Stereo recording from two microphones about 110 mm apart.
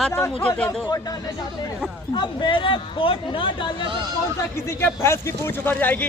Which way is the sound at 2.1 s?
45° left (ahead or behind).